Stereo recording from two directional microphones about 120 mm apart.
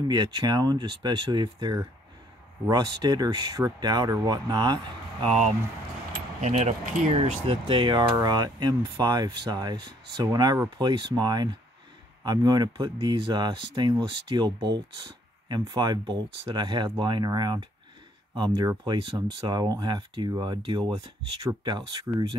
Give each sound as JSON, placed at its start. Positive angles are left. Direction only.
{"t": 0.1, "sound": "speech", "side_deg": -35}
{"t": 5.2, "sound": "speech", "side_deg": -60}